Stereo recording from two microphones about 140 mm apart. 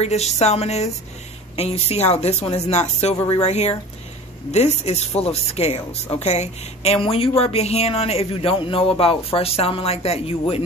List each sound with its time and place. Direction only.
0.0 s speech: 50° left (ahead or behind)